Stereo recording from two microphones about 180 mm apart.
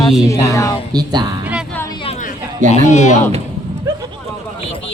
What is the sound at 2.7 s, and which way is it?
Speech, 40° left (ahead or behind).